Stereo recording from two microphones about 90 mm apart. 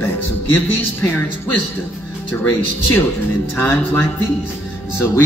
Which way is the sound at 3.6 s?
25° left (ahead or behind).